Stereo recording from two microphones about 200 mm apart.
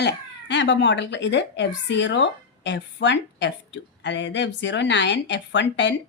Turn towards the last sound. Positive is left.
turn(degrees=60)  # may be behind; listen again after turning